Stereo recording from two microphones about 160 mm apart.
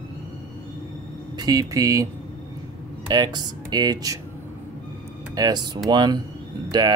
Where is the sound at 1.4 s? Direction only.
25° right (ahead or behind).